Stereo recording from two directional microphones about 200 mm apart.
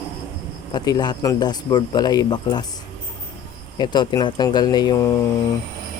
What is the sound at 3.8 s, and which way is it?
Speech, 20° left (ahead or behind).